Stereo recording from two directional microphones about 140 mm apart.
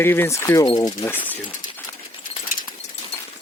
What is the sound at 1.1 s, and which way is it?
Speech, 15° left (ahead or behind).